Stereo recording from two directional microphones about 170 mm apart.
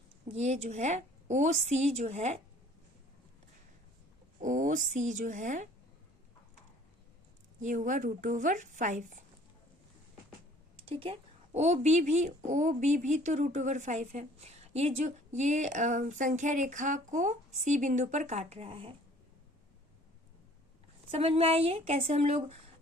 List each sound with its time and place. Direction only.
0.3 s a woman's voice: 40° right (ahead or behind)
4.4 s a sound: 50° right (ahead or behind)
4.9 s speech: 45° right (ahead or behind)
7.6 s speech: 50° right (ahead or behind)
10.8 s speech: 35° right (ahead or behind)
21.1 s a woman's voice: 35° right (ahead or behind)